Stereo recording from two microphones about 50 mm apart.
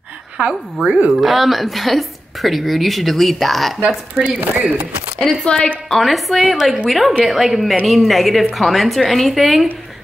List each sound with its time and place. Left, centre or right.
0.4 s a woman's voice: right
1.1 s a woman's voice: centre
4.2 s speech: right
5.2 s a woman's voice: centre
5.9 s a woman's voice: centre